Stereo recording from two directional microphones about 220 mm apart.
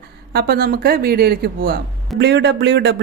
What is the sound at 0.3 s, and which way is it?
A woman's voice, 45° right (ahead or behind).